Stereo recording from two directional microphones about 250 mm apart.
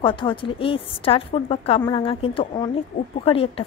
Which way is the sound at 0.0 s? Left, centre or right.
Centre.